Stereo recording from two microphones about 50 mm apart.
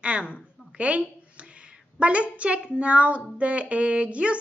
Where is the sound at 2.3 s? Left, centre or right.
Right.